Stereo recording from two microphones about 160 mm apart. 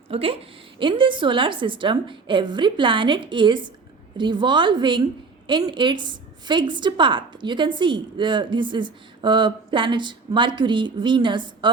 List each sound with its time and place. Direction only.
0.1 s a woman's voice: 35° right (ahead or behind)